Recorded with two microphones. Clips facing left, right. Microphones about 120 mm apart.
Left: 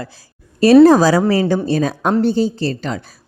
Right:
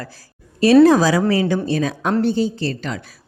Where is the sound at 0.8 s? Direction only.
35° left (ahead or behind).